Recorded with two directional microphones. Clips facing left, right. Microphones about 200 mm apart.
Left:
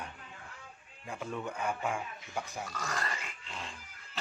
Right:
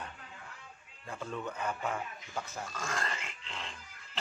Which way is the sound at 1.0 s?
10° left (ahead or behind).